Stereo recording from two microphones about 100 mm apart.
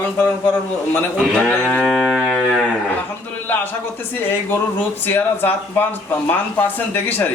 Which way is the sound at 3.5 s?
20° left (ahead or behind).